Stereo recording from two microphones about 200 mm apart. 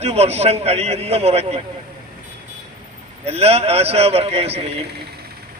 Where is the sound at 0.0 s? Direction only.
30° right (ahead or behind).